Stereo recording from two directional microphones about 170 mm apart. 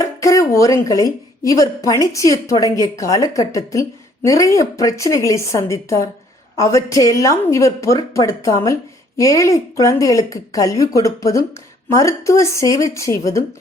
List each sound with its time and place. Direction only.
0.0 s a woman's voice: 20° left (ahead or behind)